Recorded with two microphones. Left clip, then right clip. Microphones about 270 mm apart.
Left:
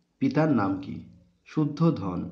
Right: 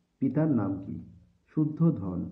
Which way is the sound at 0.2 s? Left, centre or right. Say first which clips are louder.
Left 4 dB; centre.